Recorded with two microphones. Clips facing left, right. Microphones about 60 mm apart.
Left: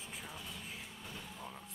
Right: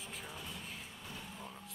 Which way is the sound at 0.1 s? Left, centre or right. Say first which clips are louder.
Even; centre.